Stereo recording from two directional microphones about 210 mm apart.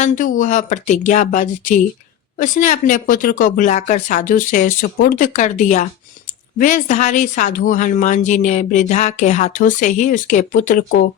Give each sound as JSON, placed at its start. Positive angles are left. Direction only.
{"t": 0.0, "sound": "speech", "side_deg": 40}